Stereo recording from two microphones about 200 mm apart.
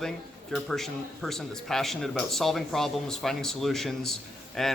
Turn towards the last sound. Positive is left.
turn(degrees=0)  # may be behind; listen again after turning